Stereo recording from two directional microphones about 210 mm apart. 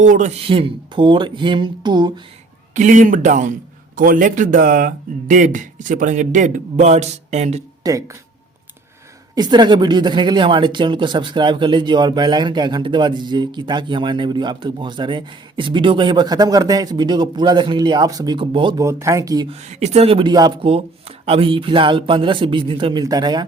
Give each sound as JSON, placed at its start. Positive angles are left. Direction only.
{"t": 0.0, "sound": "speech", "side_deg": -35}
{"t": 2.7, "sound": "a man's voice", "side_deg": -35}
{"t": 7.9, "sound": "speech", "side_deg": -15}
{"t": 9.3, "sound": "speech", "side_deg": -20}
{"t": 19.6, "sound": "speech", "side_deg": -30}